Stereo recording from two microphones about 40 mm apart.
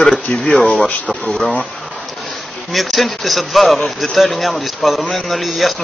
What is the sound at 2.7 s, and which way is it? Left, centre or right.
Speech, centre.